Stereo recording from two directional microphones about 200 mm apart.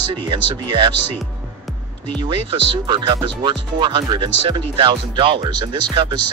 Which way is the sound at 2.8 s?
25° right (ahead or behind).